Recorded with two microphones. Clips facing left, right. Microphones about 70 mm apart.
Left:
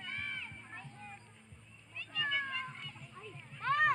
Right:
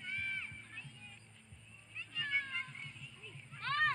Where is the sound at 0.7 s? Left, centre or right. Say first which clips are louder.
Left 5 dB; left.